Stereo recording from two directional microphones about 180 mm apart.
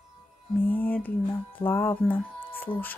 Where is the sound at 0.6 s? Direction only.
10° left (ahead or behind).